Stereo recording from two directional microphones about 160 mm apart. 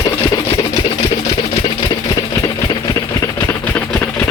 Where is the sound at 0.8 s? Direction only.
35° left (ahead or behind); by 4.3 s 10° left (ahead or behind).